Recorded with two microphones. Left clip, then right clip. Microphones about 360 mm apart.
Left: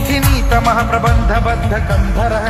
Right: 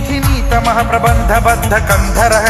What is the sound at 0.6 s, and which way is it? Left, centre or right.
Music, centre.